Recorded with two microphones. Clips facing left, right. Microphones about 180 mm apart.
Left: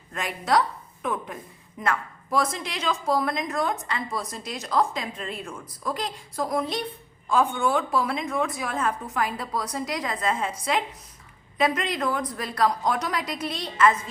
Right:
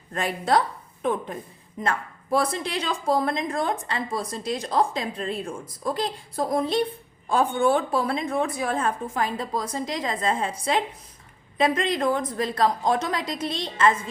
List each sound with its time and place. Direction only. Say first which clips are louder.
0.1 s a woman's voice: right 2 dB; 30° right (ahead or behind)
11.5 s a woman's voice: right 2 dB; 30° right (ahead or behind)